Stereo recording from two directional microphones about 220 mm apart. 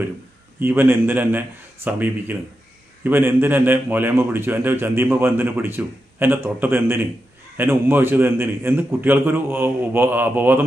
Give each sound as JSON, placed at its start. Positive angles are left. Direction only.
{"t": 0.6, "sound": "a man's voice", "side_deg": -10}